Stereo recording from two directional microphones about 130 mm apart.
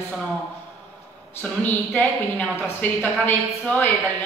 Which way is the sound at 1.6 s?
10° left (ahead or behind).